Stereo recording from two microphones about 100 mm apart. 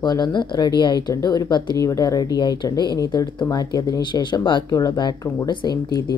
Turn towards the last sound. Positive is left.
turn(degrees=40)  # may be behind; listen again after turning